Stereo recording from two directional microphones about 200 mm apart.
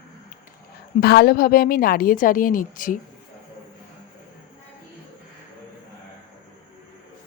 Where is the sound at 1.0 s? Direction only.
50° left (ahead or behind).